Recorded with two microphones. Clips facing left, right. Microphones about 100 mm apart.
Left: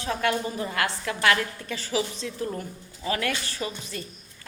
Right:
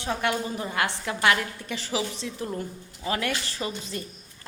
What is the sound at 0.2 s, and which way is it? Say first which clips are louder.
A woman's voice: left 1 dB; 20° right (ahead or behind).